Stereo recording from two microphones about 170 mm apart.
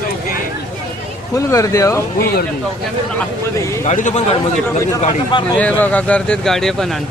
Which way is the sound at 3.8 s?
45° left (ahead or behind).